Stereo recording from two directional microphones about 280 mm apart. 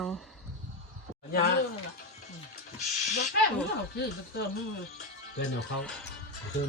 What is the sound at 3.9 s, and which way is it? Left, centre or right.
Speech, left.